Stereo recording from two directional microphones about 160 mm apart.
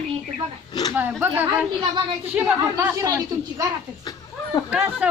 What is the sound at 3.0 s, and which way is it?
Speech, 20° right (ahead or behind).